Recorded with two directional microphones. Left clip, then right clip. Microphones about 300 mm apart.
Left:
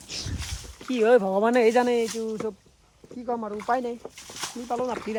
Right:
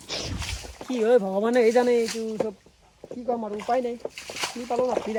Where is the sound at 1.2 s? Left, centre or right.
Left.